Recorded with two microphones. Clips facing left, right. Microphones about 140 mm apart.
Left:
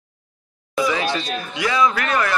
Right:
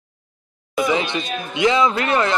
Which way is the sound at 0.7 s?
20° right (ahead or behind).